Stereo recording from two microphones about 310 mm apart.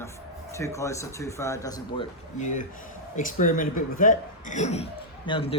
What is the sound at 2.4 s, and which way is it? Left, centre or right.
Speech, left.